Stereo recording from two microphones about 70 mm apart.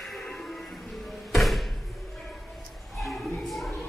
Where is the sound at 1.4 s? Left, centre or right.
Centre.